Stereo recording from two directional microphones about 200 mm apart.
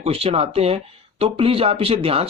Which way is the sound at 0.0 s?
30° right (ahead or behind).